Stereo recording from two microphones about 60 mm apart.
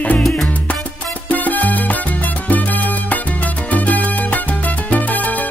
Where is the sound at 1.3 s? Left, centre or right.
Left.